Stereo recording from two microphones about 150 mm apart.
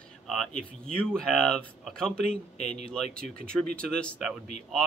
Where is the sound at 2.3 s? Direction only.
45° left (ahead or behind).